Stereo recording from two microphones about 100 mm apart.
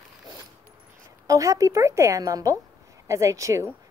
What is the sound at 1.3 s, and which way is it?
A woman's voice, 35° right (ahead or behind).